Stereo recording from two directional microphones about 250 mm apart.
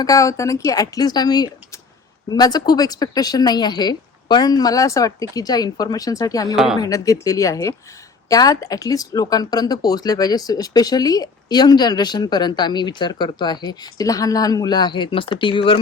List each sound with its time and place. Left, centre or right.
0.0 s speech: centre